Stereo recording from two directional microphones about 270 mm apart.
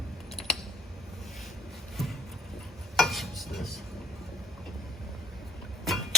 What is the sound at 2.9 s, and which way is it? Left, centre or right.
Stir, centre.